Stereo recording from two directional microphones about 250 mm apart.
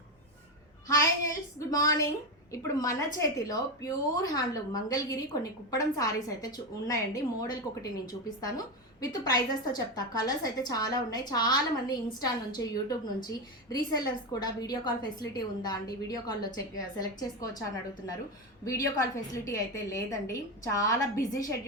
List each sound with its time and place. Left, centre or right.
0.9 s a sound: centre
2.5 s a woman's voice: centre
18.6 s a woman's voice: centre